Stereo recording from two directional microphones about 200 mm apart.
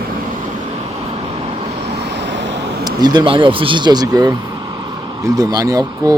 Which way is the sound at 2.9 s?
20° right (ahead or behind).